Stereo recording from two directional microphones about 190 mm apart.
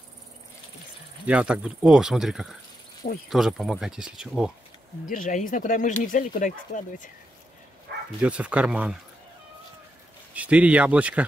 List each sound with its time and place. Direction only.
1.2 s speech: 5° right (ahead or behind)
5.0 s speech: 45° left (ahead or behind)
8.2 s speech: 5° right (ahead or behind)
10.3 s speech: 5° right (ahead or behind)